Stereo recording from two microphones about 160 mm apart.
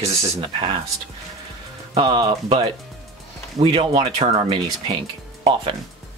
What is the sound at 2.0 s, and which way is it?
Speech, 30° right (ahead or behind).